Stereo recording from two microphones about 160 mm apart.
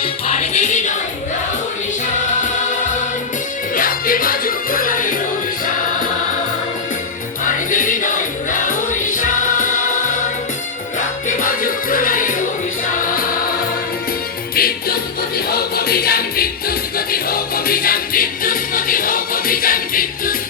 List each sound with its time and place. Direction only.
0.0 s music: 45° left (ahead or behind)
3.8 s music: 60° left (ahead or behind)
7.4 s music: 55° left (ahead or behind)
11.3 s music: 60° left (ahead or behind)
14.5 s music: 70° left (ahead or behind)